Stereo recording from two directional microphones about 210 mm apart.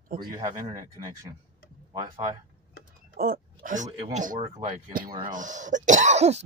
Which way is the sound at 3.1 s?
45° right (ahead or behind).